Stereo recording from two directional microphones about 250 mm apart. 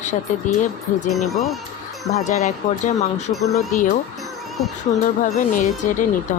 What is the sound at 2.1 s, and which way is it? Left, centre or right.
Speech, left.